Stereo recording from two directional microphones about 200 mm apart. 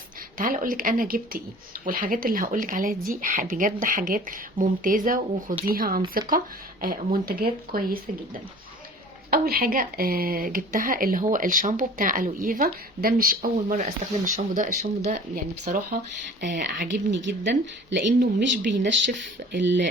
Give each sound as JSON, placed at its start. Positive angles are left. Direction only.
{"t": 0.3, "sound": "speech", "side_deg": -45}
{"t": 16.9, "sound": "speech", "side_deg": -60}